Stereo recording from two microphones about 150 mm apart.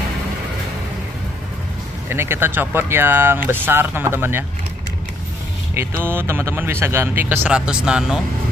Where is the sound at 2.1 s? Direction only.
15° right (ahead or behind).